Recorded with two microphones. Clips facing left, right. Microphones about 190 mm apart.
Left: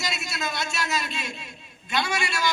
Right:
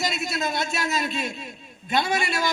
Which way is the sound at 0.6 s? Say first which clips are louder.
Right 3 dB; 50° right (ahead or behind).